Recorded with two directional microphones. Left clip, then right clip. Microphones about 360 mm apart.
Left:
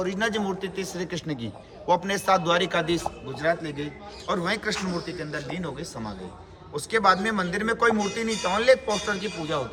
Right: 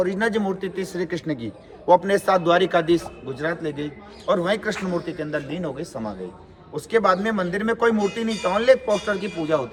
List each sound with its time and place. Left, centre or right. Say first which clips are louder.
0.0 s speech: right 4 dB; centre